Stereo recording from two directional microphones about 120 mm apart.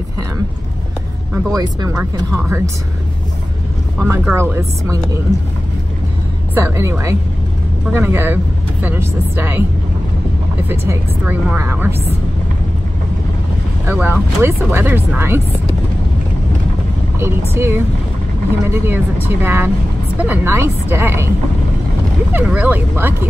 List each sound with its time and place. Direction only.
1.5 s speech: 35° right (ahead or behind)
1.9 s a woman's voice: 25° right (ahead or behind)
4.0 s a woman's voice: 15° right (ahead or behind)
6.5 s a woman's voice: 25° right (ahead or behind)
10.7 s a woman's voice: 20° right (ahead or behind)
13.9 s a woman's voice: 15° right (ahead or behind)
17.6 s a woman's voice: 20° right (ahead or behind)
22.3 s speech: 15° right (ahead or behind)